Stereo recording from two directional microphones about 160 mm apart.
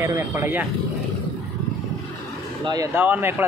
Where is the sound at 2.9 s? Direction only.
10° right (ahead or behind).